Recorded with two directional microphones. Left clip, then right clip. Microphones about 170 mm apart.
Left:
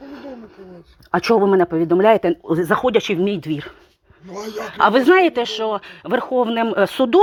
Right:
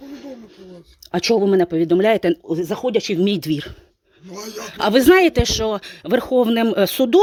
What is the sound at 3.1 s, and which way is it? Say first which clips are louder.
Speech: even; 40° right (ahead or behind).